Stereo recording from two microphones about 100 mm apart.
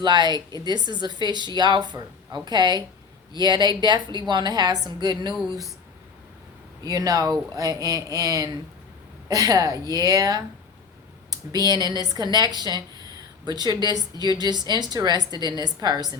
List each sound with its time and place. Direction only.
0.0 s a woman's voice: 45° right (ahead or behind)
6.8 s a woman's voice: 40° right (ahead or behind)